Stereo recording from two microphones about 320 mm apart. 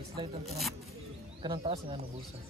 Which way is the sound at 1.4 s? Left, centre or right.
Centre.